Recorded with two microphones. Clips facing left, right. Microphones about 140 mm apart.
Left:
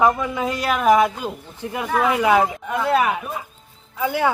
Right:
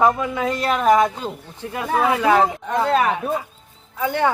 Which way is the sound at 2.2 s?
10° left (ahead or behind).